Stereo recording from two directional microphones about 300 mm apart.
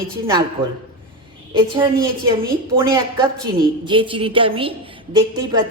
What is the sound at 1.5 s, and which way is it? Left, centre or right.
A woman's voice, centre.